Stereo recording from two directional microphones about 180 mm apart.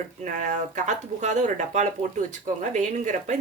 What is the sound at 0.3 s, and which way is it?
Speech, 45° right (ahead or behind).